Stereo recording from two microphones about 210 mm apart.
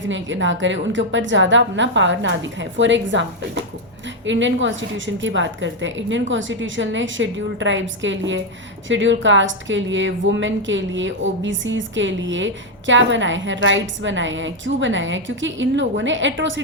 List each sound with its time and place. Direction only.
0.1 s a woman's voice: 60° right (ahead or behind)